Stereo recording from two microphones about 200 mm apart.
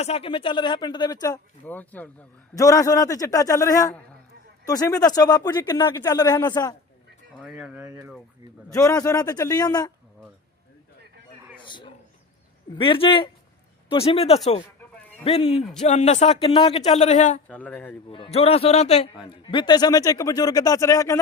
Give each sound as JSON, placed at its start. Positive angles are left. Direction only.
{"t": 0.0, "sound": "speech", "side_deg": 30}
{"t": 7.3, "sound": "speech", "side_deg": -5}
{"t": 7.9, "sound": "speech", "side_deg": -20}
{"t": 8.7, "sound": "speech", "side_deg": 15}
{"t": 11.5, "sound": "a sound", "side_deg": 25}
{"t": 12.7, "sound": "a man's voice", "side_deg": 25}
{"t": 17.5, "sound": "speech", "side_deg": 5}
{"t": 18.1, "sound": "speech", "side_deg": 30}